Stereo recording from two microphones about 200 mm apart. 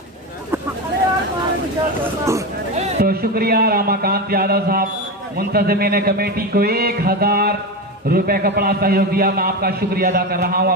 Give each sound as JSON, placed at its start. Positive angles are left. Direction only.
{"t": 3.0, "sound": "a man's voice", "side_deg": -50}